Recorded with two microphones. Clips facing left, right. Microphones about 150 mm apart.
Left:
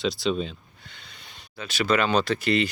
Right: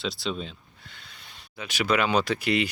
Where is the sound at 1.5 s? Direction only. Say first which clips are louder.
Left 1 dB; 15° right (ahead or behind).